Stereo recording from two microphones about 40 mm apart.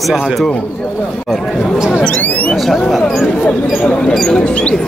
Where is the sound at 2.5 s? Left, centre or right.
Centre.